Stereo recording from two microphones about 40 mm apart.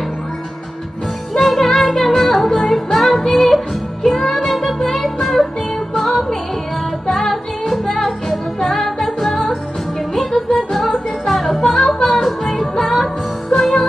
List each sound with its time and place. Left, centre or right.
1.3 s music: centre